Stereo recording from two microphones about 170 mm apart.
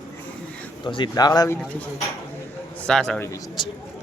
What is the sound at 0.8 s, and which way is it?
Speech, 25° left (ahead or behind).